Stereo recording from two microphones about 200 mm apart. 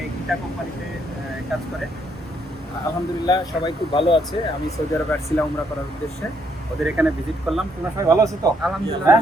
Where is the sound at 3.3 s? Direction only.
20° left (ahead or behind).